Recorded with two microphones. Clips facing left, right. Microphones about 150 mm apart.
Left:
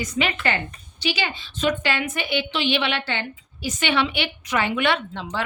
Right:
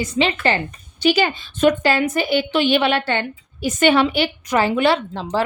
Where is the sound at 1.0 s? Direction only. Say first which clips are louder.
Right 9 dB; 45° right (ahead or behind).